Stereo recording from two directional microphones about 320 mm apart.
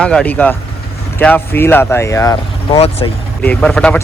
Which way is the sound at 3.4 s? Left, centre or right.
Centre.